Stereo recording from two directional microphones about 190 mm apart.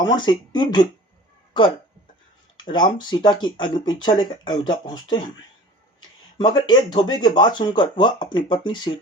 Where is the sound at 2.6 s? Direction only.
25° left (ahead or behind).